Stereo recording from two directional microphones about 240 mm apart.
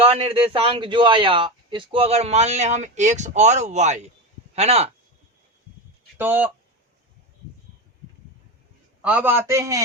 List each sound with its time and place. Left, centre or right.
0.0 s a man's voice: right
6.1 s a man's voice: centre
9.0 s a man's voice: centre